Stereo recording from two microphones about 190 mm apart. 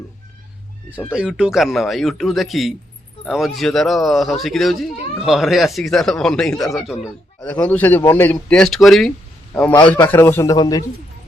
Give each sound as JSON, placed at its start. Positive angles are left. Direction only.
{"t": 0.9, "sound": "a man's voice", "side_deg": -5}
{"t": 9.9, "sound": "a man's voice", "side_deg": 10}